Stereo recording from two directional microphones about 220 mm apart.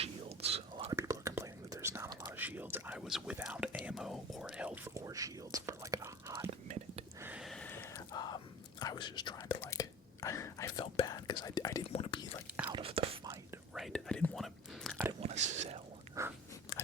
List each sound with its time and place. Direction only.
0.0 s whispering: 30° right (ahead or behind)
0.9 s whispering: 15° right (ahead or behind)
6.5 s whispering: 30° right (ahead or behind)
7.2 s whispering: 5° right (ahead or behind); by 12.3 s 20° left (ahead or behind)
12.7 s whispering: 25° right (ahead or behind)
13.7 s whispering: centre (ahead or behind)
15.2 s whispering: 30° right (ahead or behind)
16.2 s a sound: 15° right (ahead or behind)
16.7 s a sound: 15° left (ahead or behind)